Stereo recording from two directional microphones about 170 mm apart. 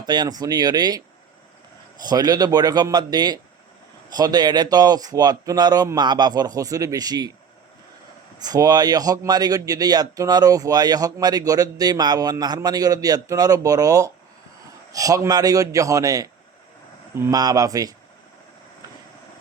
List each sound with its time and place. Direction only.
0.0 s a man's voice: 25° right (ahead or behind)
2.0 s a man's voice: 25° right (ahead or behind)
8.4 s a man's voice: 20° right (ahead or behind)